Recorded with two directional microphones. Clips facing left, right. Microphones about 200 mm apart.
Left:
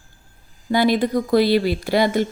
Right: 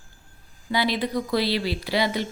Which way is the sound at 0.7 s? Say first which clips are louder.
Left 7 dB; 50° left (ahead or behind).